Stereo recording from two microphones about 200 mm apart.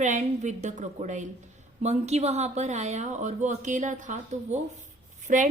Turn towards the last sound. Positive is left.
turn(degrees=-40)  # may be behind; listen again after turning